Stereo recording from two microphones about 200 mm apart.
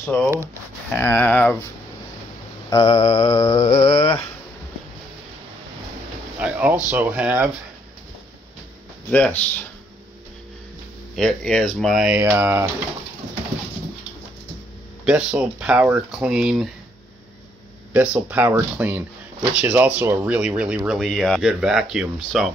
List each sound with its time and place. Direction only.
0.0 s speech: 10° left (ahead or behind)
2.7 s mantra: 25° left (ahead or behind)
6.3 s speech: 5° right (ahead or behind)
9.1 s speech: 5° left (ahead or behind)
11.1 s speech: centre (ahead or behind)
15.0 s speech: 5° right (ahead or behind)
17.9 s speech: 10° right (ahead or behind)